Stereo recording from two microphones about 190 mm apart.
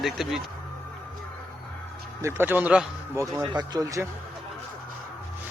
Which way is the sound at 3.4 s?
20° right (ahead or behind).